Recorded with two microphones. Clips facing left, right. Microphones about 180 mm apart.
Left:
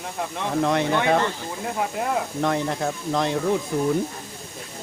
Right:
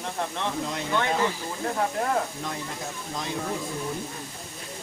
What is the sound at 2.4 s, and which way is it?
Speech, 70° left (ahead or behind).